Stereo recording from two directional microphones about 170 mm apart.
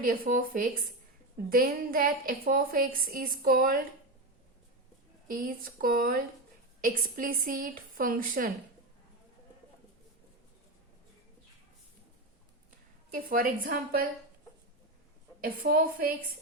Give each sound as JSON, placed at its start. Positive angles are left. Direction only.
{"t": 0.0, "sound": "a woman's voice", "side_deg": -55}
{"t": 5.3, "sound": "a woman's voice", "side_deg": -55}
{"t": 13.1, "sound": "a woman's voice", "side_deg": -55}
{"t": 15.4, "sound": "a woman's voice", "side_deg": -55}